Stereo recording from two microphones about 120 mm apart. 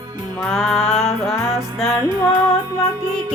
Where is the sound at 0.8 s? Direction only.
65° left (ahead or behind).